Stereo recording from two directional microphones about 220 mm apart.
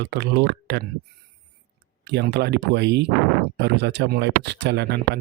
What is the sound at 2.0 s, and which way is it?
Speech, 50° right (ahead or behind).